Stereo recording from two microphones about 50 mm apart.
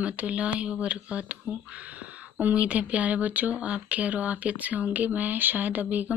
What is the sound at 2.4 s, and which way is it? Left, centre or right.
Speech, right.